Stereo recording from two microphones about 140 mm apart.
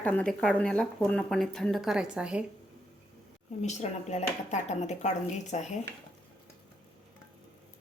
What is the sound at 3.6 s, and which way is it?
Speech, 55° left (ahead or behind).